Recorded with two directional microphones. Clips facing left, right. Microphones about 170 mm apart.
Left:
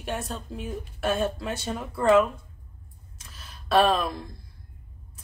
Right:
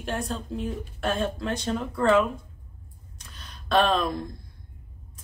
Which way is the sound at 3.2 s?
5° left (ahead or behind).